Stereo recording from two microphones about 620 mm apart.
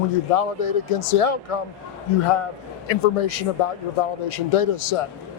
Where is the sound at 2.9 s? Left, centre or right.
Left.